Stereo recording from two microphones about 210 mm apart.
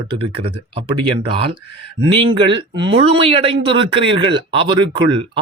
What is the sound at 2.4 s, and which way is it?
Speech, 25° right (ahead or behind).